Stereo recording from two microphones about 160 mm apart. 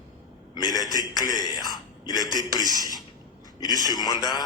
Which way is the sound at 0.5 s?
25° left (ahead or behind).